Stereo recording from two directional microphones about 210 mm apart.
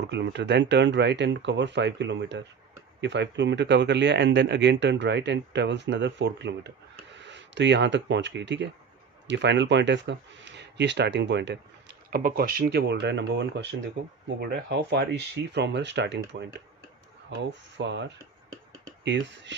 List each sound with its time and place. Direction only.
0.0 s speech: 55° right (ahead or behind)
12.1 s speech: 45° right (ahead or behind)